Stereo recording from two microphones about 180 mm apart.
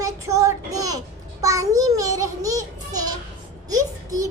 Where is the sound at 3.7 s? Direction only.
20° right (ahead or behind).